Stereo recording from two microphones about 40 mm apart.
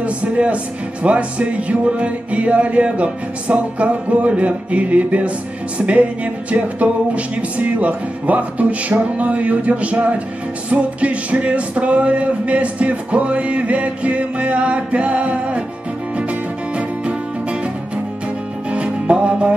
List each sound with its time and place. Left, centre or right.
0.0 s speech: right
1.0 s music: right
16.7 s music: right
18.7 s music: right